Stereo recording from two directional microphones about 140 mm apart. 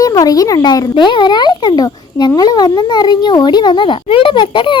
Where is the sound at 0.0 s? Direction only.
25° left (ahead or behind).